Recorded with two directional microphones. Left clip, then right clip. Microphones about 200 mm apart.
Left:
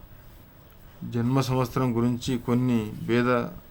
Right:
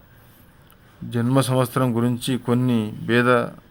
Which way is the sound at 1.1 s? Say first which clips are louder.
Right 6 dB; 20° right (ahead or behind).